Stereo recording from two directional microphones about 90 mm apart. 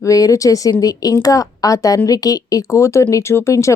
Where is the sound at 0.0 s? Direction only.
40° left (ahead or behind).